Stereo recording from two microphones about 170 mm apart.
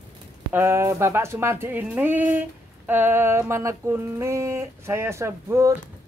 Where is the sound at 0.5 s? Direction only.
15° right (ahead or behind).